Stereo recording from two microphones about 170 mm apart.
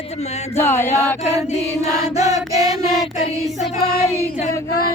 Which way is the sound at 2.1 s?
20° right (ahead or behind).